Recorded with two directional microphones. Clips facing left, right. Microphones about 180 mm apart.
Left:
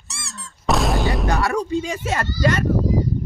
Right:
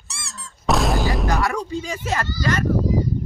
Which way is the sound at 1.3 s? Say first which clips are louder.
Left 2 dB; 30° left (ahead or behind).